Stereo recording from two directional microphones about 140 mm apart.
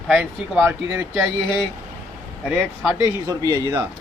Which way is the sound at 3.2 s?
25° right (ahead or behind).